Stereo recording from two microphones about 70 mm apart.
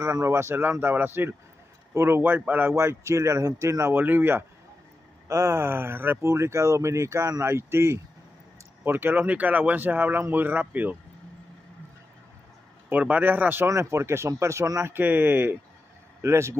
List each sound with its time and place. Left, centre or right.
0.0 s speech: right
2.7 s speech: right
4.0 s speech: right
5.3 s speech: right
12.9 s speech: right
13.7 s speech: right
14.8 s speech: right